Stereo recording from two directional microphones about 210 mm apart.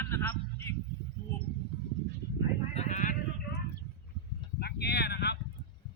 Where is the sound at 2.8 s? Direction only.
35° left (ahead or behind).